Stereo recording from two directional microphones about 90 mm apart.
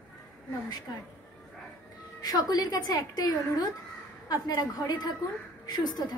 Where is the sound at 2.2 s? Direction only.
45° left (ahead or behind).